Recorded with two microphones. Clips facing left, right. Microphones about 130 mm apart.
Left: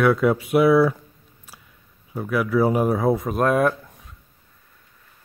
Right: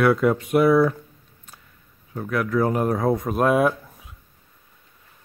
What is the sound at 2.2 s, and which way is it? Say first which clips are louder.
Speech: left 2 dB; 5° left (ahead or behind).